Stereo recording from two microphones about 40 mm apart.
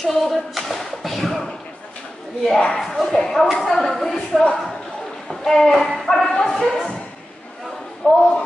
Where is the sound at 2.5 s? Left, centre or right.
Centre.